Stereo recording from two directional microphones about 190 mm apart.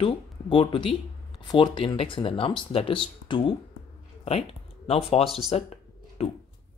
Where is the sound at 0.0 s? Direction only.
25° left (ahead or behind).